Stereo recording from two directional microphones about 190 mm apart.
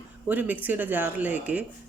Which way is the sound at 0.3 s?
10° right (ahead or behind).